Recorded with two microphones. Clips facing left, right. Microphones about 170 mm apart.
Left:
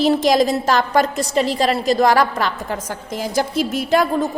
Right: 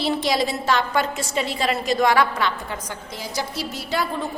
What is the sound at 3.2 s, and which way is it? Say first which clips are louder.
A woman's voice: left 9 dB; 50° left (ahead or behind).